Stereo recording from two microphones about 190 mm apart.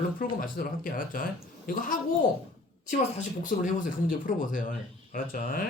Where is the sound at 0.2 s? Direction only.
45° left (ahead or behind).